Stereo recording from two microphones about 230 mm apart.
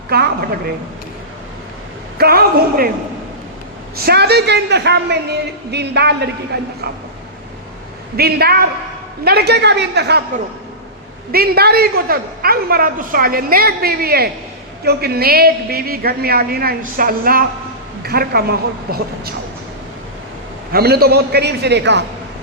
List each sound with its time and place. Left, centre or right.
0.1 s a woman's voice: right
2.1 s a man's voice: right
3.9 s a woman's voice: right
8.1 s a woman's voice: right
20.7 s a woman's voice: right